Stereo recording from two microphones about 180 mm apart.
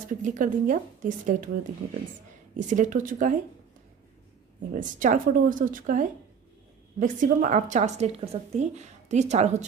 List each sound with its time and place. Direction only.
0.1 s a woman's voice: 45° right (ahead or behind)
4.7 s a woman's voice: 45° right (ahead or behind)